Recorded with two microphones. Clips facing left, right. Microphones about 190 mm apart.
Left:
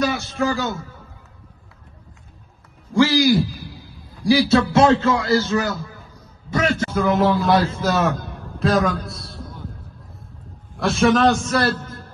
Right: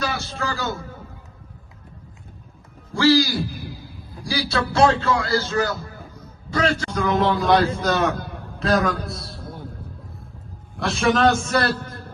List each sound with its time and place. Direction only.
0.4 s a man's voice: 20° left (ahead or behind)
2.9 s a sound: 15° left (ahead or behind)
4.3 s a man's voice: 20° left (ahead or behind)
6.5 s a sound: 20° left (ahead or behind)
6.9 s a man's voice: centre (ahead or behind)
10.8 s a man's voice: centre (ahead or behind)